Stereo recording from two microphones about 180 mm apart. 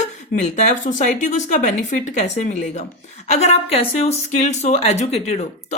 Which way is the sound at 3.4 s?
35° left (ahead or behind).